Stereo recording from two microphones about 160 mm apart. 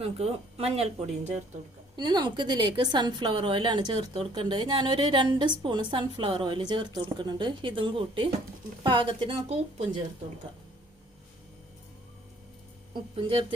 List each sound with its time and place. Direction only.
0.0 s speech: 40° right (ahead or behind)
2.0 s a woman's voice: 25° right (ahead or behind)
12.9 s speech: 30° right (ahead or behind)